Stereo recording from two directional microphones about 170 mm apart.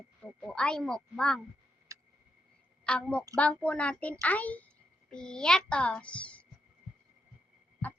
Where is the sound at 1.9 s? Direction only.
20° right (ahead or behind).